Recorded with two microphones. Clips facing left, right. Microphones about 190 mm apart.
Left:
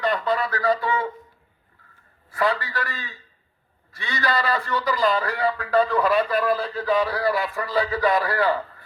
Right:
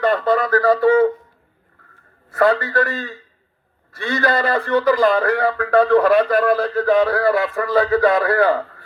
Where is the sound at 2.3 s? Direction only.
55° right (ahead or behind).